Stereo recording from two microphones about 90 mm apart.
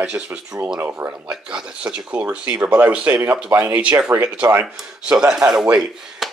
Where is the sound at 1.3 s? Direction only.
10° right (ahead or behind).